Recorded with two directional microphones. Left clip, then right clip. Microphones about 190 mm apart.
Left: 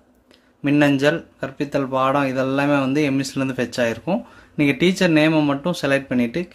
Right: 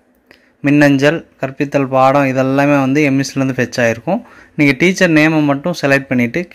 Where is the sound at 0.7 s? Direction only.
20° right (ahead or behind).